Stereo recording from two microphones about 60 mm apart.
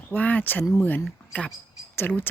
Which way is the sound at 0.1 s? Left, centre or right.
Left.